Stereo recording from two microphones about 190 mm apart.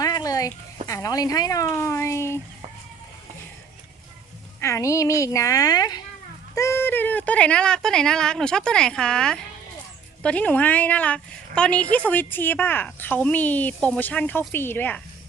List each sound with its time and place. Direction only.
0.0 s a sound: 20° left (ahead or behind)
0.9 s a woman's voice: 15° left (ahead or behind)
4.6 s a woman's voice: 15° left (ahead or behind)